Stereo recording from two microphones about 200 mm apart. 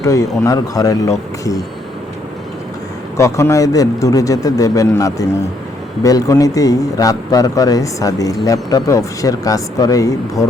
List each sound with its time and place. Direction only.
0.0 s a man's voice: 15° left (ahead or behind)
3.2 s a man's voice: 15° left (ahead or behind)